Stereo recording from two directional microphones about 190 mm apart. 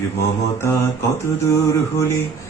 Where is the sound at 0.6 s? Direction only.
15° left (ahead or behind).